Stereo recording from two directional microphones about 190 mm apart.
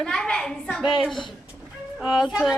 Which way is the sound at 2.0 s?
5° right (ahead or behind).